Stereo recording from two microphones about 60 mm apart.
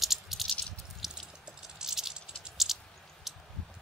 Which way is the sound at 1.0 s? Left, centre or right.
Centre.